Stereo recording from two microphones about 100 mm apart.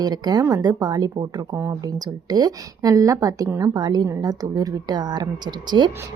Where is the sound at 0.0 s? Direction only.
45° right (ahead or behind).